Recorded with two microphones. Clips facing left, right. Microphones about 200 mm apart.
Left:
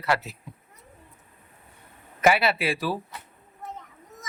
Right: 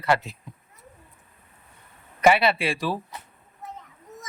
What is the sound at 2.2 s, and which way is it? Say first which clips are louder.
Speech: right 2 dB; 5° left (ahead or behind).